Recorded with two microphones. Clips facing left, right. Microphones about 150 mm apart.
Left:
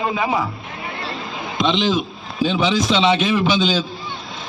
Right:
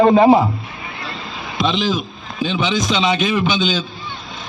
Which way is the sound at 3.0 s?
Centre (ahead or behind).